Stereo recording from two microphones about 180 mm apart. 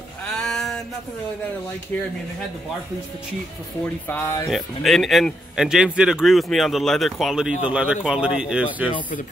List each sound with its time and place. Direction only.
0.3 s a sound: 5° left (ahead or behind)
4.1 s speech: 15° left (ahead or behind)
4.5 s a man's voice: centre (ahead or behind)